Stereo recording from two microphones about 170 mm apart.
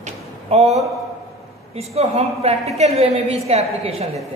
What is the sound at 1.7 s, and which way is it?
A woman's voice, 35° right (ahead or behind).